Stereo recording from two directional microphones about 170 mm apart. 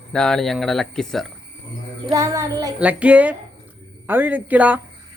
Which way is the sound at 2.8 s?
10° right (ahead or behind).